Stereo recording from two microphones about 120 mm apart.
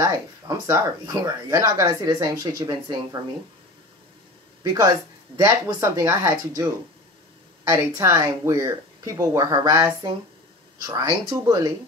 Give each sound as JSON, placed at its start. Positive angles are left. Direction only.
{"t": 0.0, "sound": "speech", "side_deg": -25}
{"t": 5.4, "sound": "speech", "side_deg": -30}